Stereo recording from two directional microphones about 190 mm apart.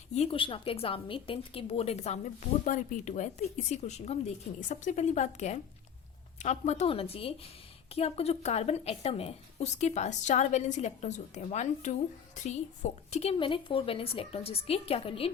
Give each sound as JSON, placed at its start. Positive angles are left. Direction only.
{"t": 0.1, "sound": "a woman's voice", "side_deg": 30}